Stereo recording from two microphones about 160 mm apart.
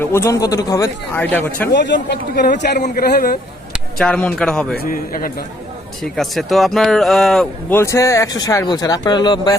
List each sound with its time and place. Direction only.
0.0 s speech: 15° left (ahead or behind)
1.7 s speech: 90° left
2.8 s a man's voice: 65° left (ahead or behind)
3.7 s speech: 5° left (ahead or behind)
4.7 s a man's voice: 70° left (ahead or behind)
6.0 s speech: centre (ahead or behind)
7.7 s speech: 15° left (ahead or behind)